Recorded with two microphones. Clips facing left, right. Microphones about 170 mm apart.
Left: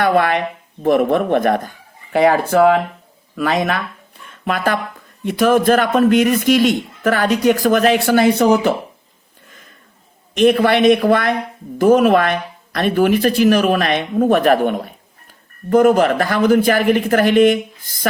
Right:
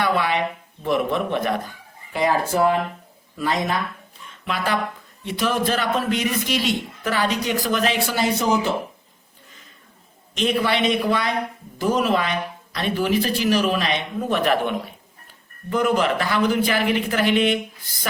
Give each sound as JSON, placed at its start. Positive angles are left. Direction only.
{"t": 0.0, "sound": "a man's voice", "side_deg": 55}
{"t": 2.1, "sound": "speech", "side_deg": 65}
{"t": 4.4, "sound": "a man's voice", "side_deg": 50}
{"t": 10.3, "sound": "a man's voice", "side_deg": 50}